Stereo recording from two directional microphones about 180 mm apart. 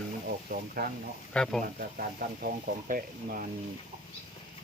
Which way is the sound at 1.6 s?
50° right (ahead or behind).